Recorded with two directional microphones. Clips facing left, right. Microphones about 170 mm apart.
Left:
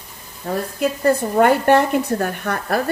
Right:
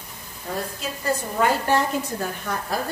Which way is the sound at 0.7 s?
55° left (ahead or behind).